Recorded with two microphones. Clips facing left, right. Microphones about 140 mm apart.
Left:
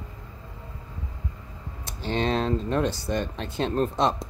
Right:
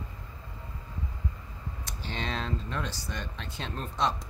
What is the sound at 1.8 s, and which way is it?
Typing, 30° left (ahead or behind).